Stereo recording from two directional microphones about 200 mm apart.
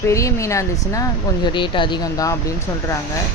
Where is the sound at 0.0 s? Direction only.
15° left (ahead or behind).